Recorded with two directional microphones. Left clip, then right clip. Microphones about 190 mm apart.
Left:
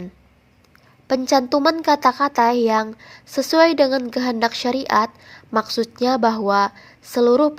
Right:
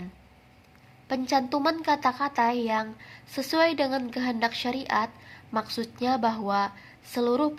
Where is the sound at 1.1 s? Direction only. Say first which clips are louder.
Left 9 dB; 40° left (ahead or behind).